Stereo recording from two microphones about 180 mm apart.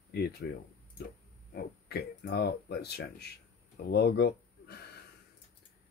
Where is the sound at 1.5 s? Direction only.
60° left (ahead or behind).